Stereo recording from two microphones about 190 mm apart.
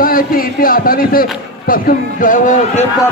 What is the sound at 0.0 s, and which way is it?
A man's voice, 50° left (ahead or behind).